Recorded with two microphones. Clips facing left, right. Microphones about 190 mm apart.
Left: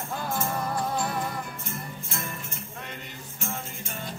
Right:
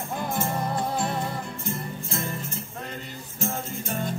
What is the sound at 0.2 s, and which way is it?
Music, 25° right (ahead or behind).